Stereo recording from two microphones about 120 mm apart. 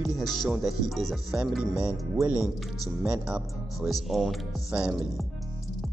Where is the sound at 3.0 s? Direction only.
5° right (ahead or behind).